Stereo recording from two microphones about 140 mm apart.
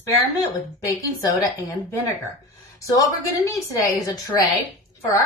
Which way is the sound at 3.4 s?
20° left (ahead or behind).